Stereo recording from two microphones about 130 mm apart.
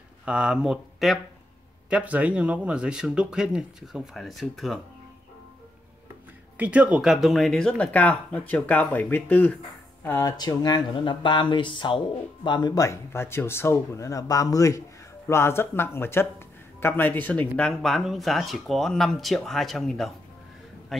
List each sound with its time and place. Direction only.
0.2 s speech: 5° right (ahead or behind)
6.5 s speech: 10° right (ahead or behind); by 9.6 s 15° left (ahead or behind)
10.2 s a man's voice: 30° left (ahead or behind); by 21.1 s centre (ahead or behind)